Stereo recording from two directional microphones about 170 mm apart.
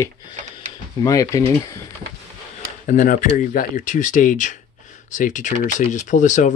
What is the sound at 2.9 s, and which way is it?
Speech, 50° left (ahead or behind).